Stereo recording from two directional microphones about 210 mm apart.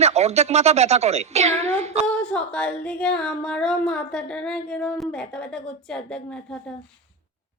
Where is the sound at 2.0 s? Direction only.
5° left (ahead or behind).